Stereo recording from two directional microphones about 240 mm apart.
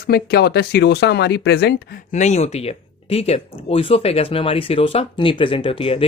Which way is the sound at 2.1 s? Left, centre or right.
Left.